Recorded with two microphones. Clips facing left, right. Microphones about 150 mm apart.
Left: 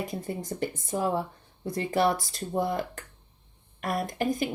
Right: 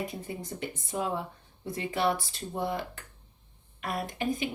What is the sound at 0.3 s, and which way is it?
Speech, 45° left (ahead or behind).